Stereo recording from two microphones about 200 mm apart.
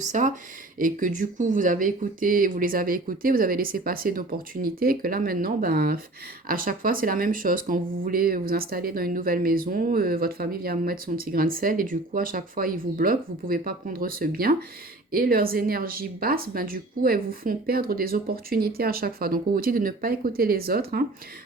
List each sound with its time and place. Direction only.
0.0 s speech: 40° right (ahead or behind)